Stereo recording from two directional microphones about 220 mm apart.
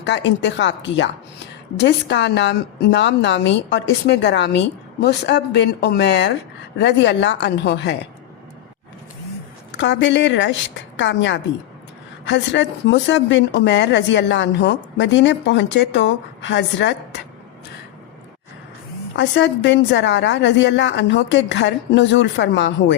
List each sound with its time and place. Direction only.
0.0 s a woman's voice: 55° left (ahead or behind)
9.7 s a woman's voice: 55° left (ahead or behind)
19.1 s a woman's voice: 55° left (ahead or behind)